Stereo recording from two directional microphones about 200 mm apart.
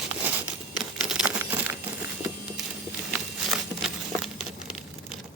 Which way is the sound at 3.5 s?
Centre (ahead or behind).